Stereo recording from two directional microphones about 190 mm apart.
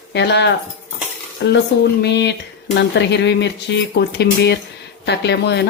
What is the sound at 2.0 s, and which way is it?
Speech, 60° left (ahead or behind).